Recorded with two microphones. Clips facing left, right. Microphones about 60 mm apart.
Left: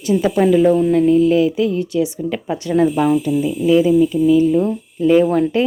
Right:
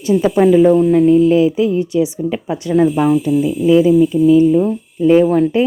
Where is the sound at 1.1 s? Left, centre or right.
Right.